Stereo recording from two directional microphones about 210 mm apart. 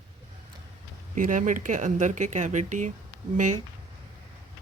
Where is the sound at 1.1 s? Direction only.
40° right (ahead or behind).